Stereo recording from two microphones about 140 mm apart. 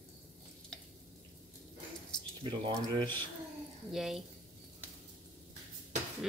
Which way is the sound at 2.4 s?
35° right (ahead or behind).